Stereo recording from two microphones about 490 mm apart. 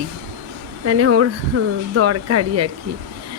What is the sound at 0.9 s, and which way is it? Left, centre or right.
Speech, right.